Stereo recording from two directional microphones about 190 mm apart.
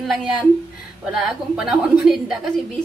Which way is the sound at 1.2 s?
5° right (ahead or behind).